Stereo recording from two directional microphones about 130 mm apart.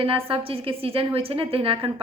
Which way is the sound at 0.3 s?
45° right (ahead or behind).